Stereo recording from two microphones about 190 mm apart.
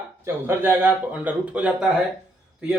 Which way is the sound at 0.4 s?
10° right (ahead or behind).